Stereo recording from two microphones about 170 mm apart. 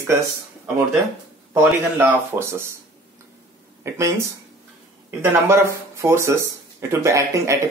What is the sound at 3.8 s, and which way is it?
Speech, 15° right (ahead or behind).